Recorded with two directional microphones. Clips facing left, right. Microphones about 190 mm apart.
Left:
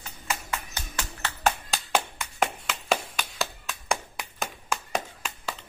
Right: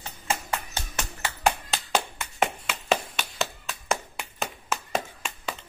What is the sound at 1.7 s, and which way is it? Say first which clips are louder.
Clapping: even; centre (ahead or behind).